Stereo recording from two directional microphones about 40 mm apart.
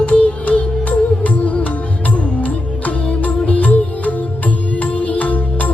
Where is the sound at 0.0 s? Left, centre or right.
Left.